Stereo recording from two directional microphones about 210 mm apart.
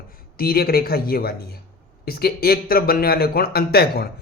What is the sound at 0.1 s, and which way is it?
Speech, 45° left (ahead or behind).